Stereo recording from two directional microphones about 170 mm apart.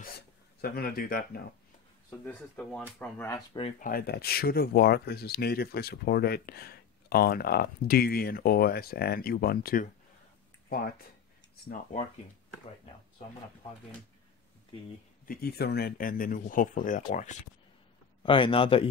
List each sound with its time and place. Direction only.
0.6 s speech: 60° left (ahead or behind)
2.0 s speech: 10° left (ahead or behind)
3.8 s speech: 60° left (ahead or behind)
15.2 s speech: 65° left (ahead or behind); by 17.4 s 45° left (ahead or behind)
18.2 s a man's voice: 30° left (ahead or behind)